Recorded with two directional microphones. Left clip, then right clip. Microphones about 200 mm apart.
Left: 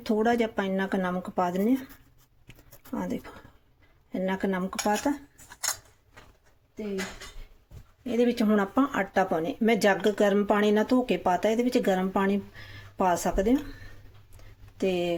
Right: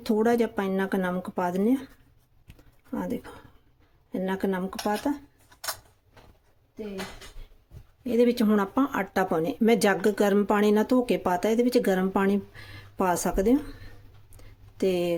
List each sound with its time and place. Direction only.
0.0 s speech: 20° right (ahead or behind)
2.9 s speech: 10° right (ahead or behind)
4.8 s cutlery: 5° left (ahead or behind)
8.0 s speech: 25° right (ahead or behind); by 9.2 s 10° right (ahead or behind)
9.3 s speech: 20° right (ahead or behind)
14.8 s speech: 20° right (ahead or behind)